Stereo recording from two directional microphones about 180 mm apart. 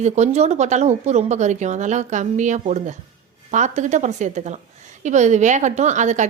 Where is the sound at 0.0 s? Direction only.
40° right (ahead or behind).